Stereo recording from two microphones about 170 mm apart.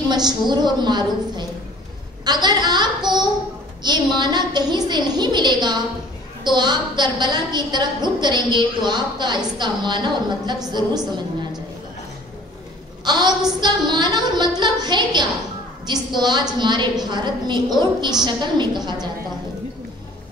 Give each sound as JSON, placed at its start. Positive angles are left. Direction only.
{"t": 0.1, "sound": "a woman's voice", "side_deg": -25}
{"t": 13.0, "sound": "a woman's voice", "side_deg": -25}